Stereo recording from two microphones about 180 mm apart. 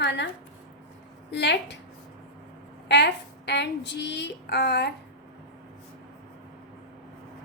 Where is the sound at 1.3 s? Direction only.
75° left (ahead or behind).